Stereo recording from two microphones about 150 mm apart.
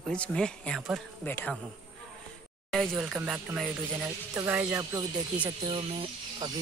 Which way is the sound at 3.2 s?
10° right (ahead or behind).